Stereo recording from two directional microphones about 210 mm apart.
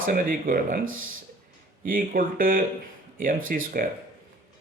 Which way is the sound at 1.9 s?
40° right (ahead or behind).